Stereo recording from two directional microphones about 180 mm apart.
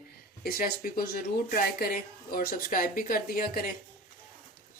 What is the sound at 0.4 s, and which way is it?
Speech, 55° left (ahead or behind).